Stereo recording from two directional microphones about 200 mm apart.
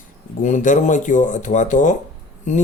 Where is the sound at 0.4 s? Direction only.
40° left (ahead or behind).